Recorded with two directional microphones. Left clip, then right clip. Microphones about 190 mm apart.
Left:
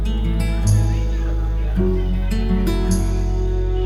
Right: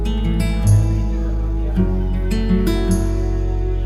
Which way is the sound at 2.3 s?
Centre (ahead or behind).